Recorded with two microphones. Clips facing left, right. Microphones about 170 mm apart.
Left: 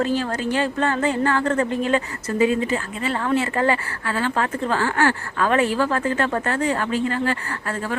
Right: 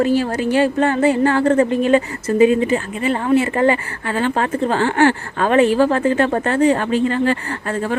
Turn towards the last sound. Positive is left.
turn(degrees=-20)  # may be behind; listen again after turning